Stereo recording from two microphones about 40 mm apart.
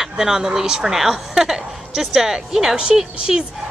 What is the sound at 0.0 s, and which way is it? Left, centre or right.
Speech, centre.